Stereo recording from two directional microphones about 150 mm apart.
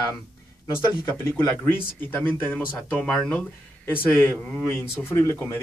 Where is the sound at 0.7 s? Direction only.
15° left (ahead or behind).